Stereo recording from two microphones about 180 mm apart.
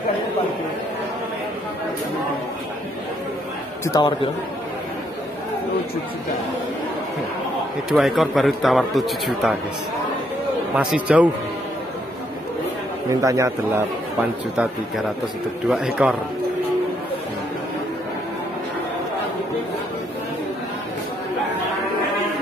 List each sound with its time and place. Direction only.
3.8 s a man's voice: 25° left (ahead or behind)
7.9 s a man's voice: centre (ahead or behind)
10.7 s a man's voice: 5° right (ahead or behind)
13.1 s a man's voice: 20° right (ahead or behind)
15.7 s a man's voice: 5° right (ahead or behind)